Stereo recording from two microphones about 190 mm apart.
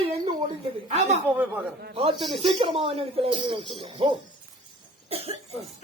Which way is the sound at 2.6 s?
30° right (ahead or behind).